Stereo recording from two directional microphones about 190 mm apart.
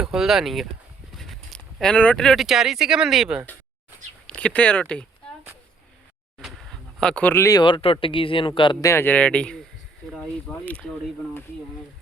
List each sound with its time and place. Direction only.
0.0 s speech: centre (ahead or behind)
6.4 s speech: centre (ahead or behind)
10.7 s speech: 5° left (ahead or behind)